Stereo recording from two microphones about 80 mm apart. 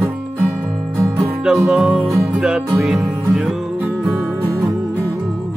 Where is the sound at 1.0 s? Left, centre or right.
Right.